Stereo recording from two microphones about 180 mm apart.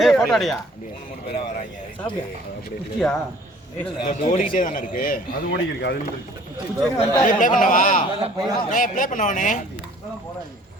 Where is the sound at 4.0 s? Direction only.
30° left (ahead or behind).